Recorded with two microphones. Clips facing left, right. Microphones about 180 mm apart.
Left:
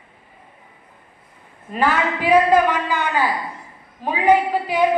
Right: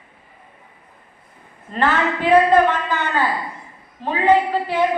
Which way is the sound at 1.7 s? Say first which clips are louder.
Even; 10° left (ahead or behind).